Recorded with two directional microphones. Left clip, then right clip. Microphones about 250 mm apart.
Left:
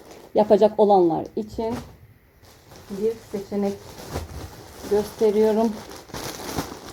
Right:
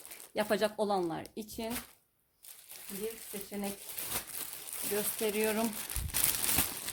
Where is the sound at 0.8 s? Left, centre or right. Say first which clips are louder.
Left 16 dB; right.